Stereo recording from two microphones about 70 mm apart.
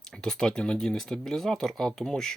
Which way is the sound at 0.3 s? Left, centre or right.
Centre.